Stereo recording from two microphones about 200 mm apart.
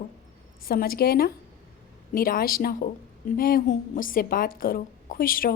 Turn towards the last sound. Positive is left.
turn(degrees=45)  # may be behind; listen again after turning